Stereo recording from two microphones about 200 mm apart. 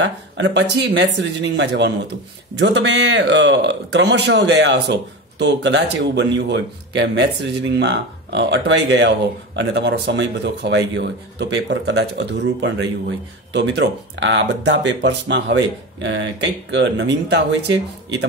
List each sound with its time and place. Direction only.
0.0 s speech: 60° right (ahead or behind)